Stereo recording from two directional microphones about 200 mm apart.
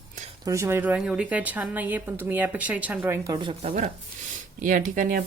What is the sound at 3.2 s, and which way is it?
Speech, 20° right (ahead or behind).